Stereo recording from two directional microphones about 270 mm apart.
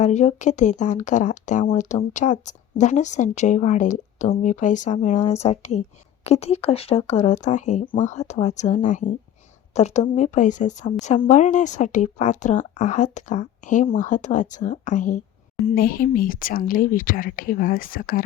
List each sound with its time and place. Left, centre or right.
0.0 s speech: left